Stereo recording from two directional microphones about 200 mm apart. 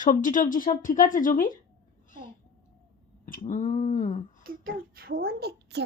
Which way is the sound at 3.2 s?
45° left (ahead or behind).